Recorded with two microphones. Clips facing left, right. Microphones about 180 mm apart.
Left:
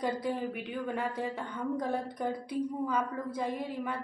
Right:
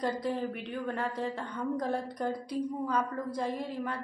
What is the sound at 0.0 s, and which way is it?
A woman's voice, 5° left (ahead or behind).